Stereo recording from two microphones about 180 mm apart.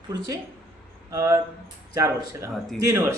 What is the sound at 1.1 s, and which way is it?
Speech, 15° right (ahead or behind).